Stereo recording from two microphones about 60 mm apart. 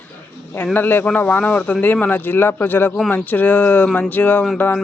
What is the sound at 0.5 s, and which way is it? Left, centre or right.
Speech, left.